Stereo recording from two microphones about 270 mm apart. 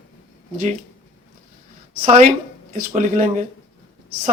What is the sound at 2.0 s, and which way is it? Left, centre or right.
Speech, right.